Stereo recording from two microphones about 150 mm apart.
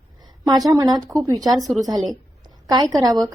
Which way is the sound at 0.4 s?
25° right (ahead or behind).